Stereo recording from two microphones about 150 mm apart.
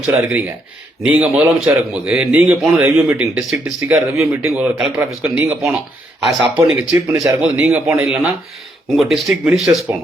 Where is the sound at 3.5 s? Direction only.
20° right (ahead or behind).